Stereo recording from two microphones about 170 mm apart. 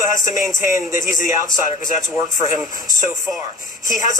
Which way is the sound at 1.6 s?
50° left (ahead or behind).